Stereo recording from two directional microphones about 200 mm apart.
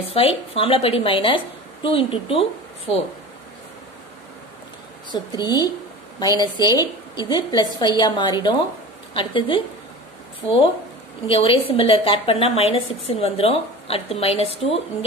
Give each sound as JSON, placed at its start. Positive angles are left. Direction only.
{"t": 0.1, "sound": "a woman's voice", "side_deg": 30}
{"t": 5.1, "sound": "a woman's voice", "side_deg": 20}
{"t": 11.2, "sound": "a woman's voice", "side_deg": 25}